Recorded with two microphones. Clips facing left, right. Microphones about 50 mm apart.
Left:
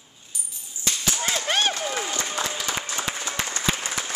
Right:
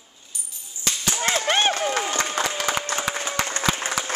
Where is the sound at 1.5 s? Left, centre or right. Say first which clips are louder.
Right 3 dB; right.